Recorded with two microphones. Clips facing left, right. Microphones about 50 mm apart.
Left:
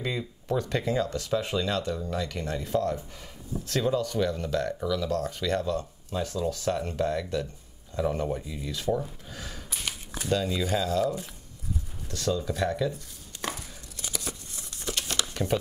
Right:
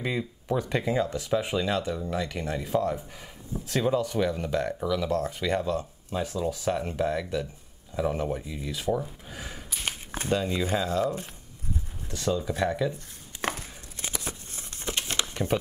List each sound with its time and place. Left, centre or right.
0.0 s speech: centre
9.8 s a sound: right
10.3 s speech: right
12.9 s tearing: right